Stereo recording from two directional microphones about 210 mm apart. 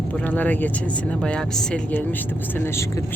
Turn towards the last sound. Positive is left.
turn(degrees=5)  # may be behind; listen again after turning